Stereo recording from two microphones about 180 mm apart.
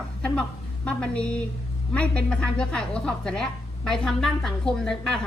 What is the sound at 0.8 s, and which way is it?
A woman's voice, 5° left (ahead or behind).